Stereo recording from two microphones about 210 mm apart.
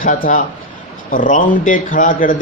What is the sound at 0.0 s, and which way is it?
A man's voice, 40° left (ahead or behind).